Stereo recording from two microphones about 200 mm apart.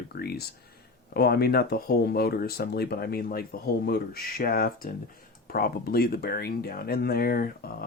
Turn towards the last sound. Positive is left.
turn(degrees=50)  # may be behind; listen again after turning